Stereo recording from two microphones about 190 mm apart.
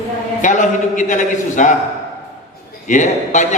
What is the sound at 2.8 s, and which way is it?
Speech, 40° left (ahead or behind).